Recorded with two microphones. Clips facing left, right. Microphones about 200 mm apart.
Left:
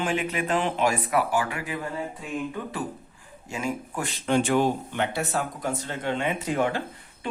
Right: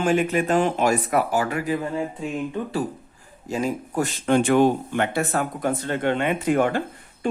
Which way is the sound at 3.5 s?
35° right (ahead or behind).